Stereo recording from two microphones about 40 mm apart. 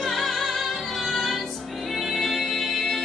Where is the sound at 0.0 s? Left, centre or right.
Centre.